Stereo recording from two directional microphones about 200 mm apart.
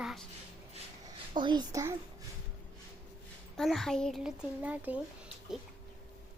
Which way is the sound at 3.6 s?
Centre (ahead or behind).